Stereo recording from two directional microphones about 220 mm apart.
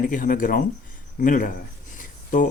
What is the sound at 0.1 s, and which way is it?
Speech, 35° left (ahead or behind).